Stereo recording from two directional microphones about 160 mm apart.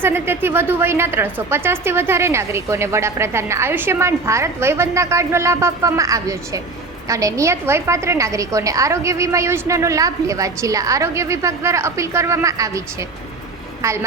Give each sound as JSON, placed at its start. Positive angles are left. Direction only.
{"t": 0.0, "sound": "a woman's voice", "side_deg": -15}